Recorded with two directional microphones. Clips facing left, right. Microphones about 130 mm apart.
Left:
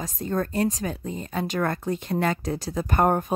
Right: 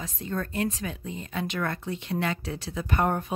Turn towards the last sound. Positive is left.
turn(degrees=45)  # may be behind; listen again after turning